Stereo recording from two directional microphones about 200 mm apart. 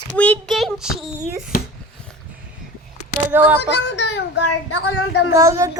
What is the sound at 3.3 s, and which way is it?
Speech, 10° right (ahead or behind).